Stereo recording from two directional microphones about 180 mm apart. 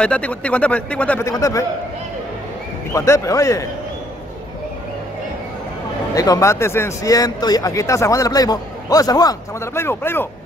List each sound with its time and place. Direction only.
0.0 s a man's voice: 5° left (ahead or behind)
2.9 s a man's voice: 15° left (ahead or behind)
6.1 s speech: 20° left (ahead or behind)